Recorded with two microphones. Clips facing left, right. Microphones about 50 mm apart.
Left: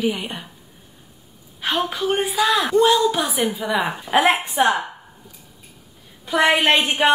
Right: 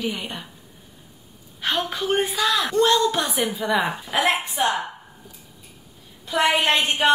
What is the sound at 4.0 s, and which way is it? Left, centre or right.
Speech, left.